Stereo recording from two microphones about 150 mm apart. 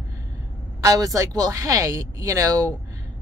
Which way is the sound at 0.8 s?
25° right (ahead or behind).